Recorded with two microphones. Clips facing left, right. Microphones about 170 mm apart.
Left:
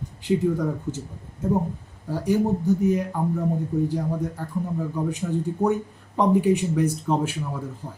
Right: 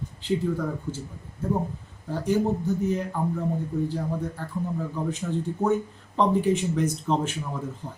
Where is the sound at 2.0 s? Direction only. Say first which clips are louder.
Left 2 dB; 10° left (ahead or behind).